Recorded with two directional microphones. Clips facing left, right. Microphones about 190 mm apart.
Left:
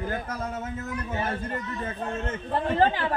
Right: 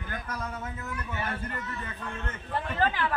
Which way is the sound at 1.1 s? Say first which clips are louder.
Left 5 dB; 30° left (ahead or behind).